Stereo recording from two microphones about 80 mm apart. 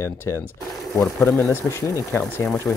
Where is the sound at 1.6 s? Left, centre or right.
Left.